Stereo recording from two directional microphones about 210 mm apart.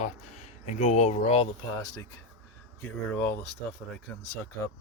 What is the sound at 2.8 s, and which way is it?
Speech, 10° left (ahead or behind).